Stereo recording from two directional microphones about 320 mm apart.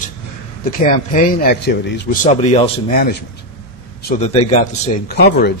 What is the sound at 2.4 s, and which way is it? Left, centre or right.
Speech, centre.